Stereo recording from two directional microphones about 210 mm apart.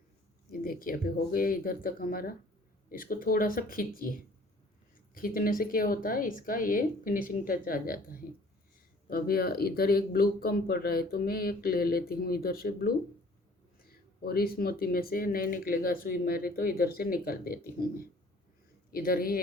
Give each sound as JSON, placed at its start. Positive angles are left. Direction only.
{"t": 0.5, "sound": "speech", "side_deg": 45}
{"t": 5.1, "sound": "speech", "side_deg": 40}
{"t": 13.9, "sound": "speech", "side_deg": 45}
{"t": 18.9, "sound": "speech", "side_deg": 45}